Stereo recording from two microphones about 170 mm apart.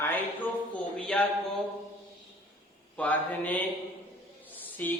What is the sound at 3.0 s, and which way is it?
Speech, 10° left (ahead or behind).